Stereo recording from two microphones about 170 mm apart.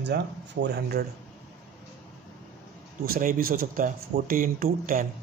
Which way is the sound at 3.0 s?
55° right (ahead or behind).